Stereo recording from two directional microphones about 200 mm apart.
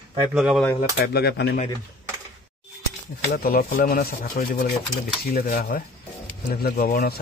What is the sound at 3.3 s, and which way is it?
Speech, 45° left (ahead or behind).